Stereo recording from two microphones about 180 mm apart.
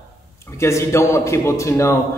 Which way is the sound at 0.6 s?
15° left (ahead or behind).